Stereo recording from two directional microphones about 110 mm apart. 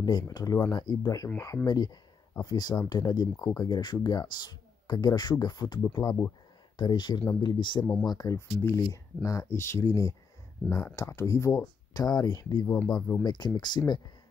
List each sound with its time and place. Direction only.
0.0 s speech: 40° left (ahead or behind)
8.3 s speech: 25° left (ahead or behind)